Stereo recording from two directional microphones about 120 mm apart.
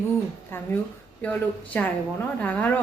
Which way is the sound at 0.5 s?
15° left (ahead or behind).